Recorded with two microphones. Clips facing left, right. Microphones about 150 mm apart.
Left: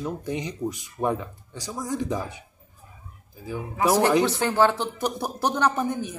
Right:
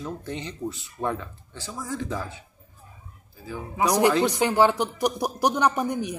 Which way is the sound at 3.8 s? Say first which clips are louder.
Left 1 dB; 15° right (ahead or behind).